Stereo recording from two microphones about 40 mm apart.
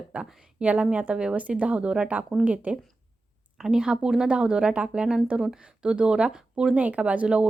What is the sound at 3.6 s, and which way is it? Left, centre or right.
Speech, centre.